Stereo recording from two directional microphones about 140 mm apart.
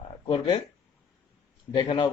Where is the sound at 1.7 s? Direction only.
35° left (ahead or behind).